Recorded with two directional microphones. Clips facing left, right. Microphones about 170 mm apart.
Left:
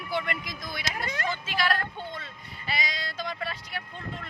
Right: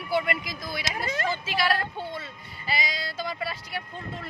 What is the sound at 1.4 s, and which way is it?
Speech, 5° right (ahead or behind).